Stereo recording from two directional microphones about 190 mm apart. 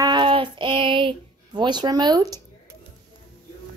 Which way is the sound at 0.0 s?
25° right (ahead or behind).